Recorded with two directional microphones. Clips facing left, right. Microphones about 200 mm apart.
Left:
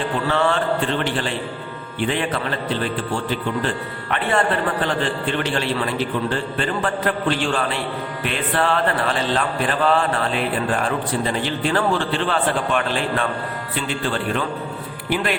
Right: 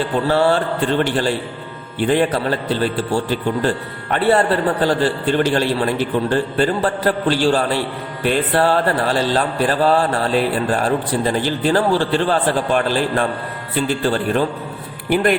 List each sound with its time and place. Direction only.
0.3 s music: 35° right (ahead or behind)
15.1 s speech: 50° right (ahead or behind)